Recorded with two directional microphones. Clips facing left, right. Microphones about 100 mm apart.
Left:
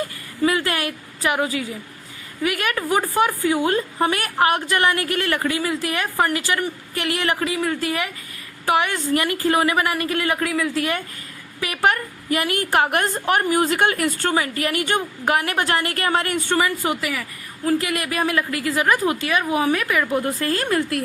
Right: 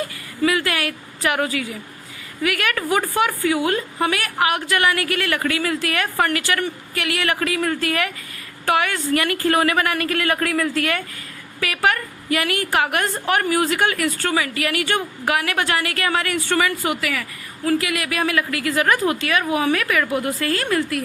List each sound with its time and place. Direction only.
0.4 s a woman's voice: 30° left (ahead or behind)
1.2 s a woman's voice: 20° left (ahead or behind)
6.9 s a woman's voice: 30° left (ahead or behind)
10.4 s a woman's voice: 10° left (ahead or behind)
11.6 s a woman's voice: 25° left (ahead or behind)
13.7 s a woman's voice: 35° left (ahead or behind)
14.8 s a woman's voice: 20° left (ahead or behind)
15.3 s a woman's voice: 30° left (ahead or behind)
16.5 s a woman's voice: 25° left (ahead or behind)
17.7 s a woman's voice: 30° left (ahead or behind)